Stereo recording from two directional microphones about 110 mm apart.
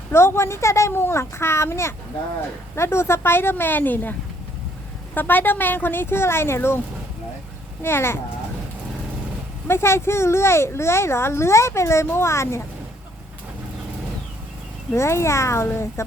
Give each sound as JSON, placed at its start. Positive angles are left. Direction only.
{"t": 0.1, "sound": "speech", "side_deg": 25}
{"t": 5.1, "sound": "speech", "side_deg": 15}
{"t": 7.8, "sound": "speech", "side_deg": 20}
{"t": 9.6, "sound": "speech", "side_deg": 25}
{"t": 14.9, "sound": "speech", "side_deg": 25}